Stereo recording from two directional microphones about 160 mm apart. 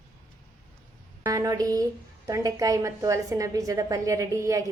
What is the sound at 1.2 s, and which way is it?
A woman's voice, 20° right (ahead or behind).